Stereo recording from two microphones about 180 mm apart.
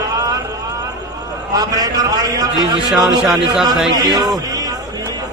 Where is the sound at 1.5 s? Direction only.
20° right (ahead or behind).